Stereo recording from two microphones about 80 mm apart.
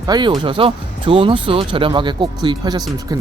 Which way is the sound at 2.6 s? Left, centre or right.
Right.